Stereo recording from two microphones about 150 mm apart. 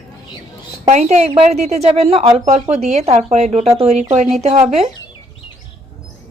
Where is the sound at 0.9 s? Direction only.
45° right (ahead or behind).